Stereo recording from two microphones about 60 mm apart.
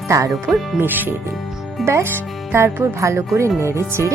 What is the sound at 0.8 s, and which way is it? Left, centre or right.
Speech, right.